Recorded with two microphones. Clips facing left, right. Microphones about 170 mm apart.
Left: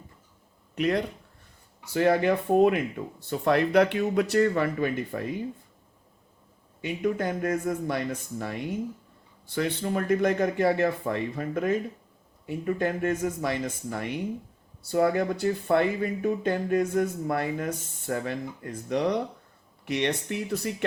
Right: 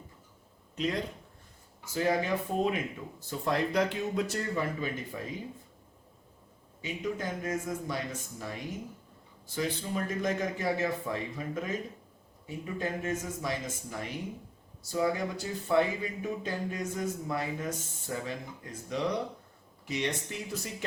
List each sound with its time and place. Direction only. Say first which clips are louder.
0.8 s speech: left 6 dB; 65° left (ahead or behind)
6.8 s speech: left 7 dB; 60° left (ahead or behind)